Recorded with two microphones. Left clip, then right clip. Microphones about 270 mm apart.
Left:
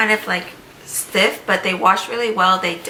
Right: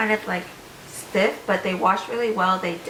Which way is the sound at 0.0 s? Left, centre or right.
Centre.